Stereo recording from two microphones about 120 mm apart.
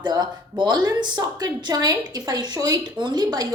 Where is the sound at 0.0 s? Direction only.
35° right (ahead or behind).